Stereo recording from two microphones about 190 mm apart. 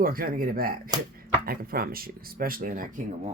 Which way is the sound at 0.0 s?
50° right (ahead or behind).